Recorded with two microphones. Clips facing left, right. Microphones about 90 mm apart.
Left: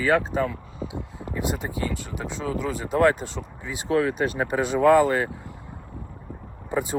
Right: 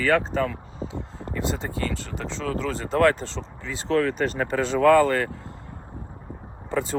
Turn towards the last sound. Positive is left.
turn(degrees=15)  # may be behind; listen again after turning